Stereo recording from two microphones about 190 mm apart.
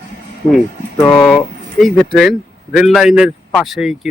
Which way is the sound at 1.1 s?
Centre (ahead or behind).